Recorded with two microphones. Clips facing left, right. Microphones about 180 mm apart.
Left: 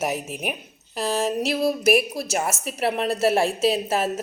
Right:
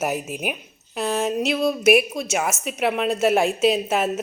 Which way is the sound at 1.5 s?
30° left (ahead or behind).